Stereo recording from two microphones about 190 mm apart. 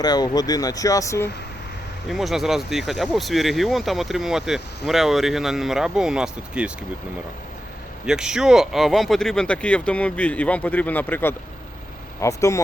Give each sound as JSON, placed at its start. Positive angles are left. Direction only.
{"t": 0.0, "sound": "speech", "side_deg": 20}
{"t": 2.0, "sound": "speech", "side_deg": 0}
{"t": 8.0, "sound": "speech", "side_deg": -5}